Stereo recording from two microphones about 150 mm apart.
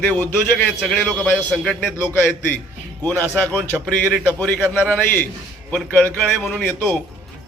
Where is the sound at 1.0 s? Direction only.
Centre (ahead or behind).